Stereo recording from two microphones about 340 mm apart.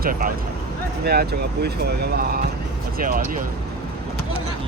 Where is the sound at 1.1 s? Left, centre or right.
Right.